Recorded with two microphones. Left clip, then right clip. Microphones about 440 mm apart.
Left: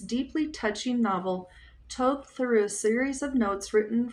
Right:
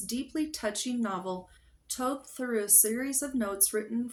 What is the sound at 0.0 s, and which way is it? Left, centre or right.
Speech, right.